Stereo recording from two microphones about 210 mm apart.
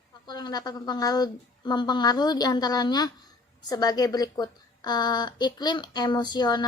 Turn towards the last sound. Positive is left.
turn(degrees=20)  # may be behind; listen again after turning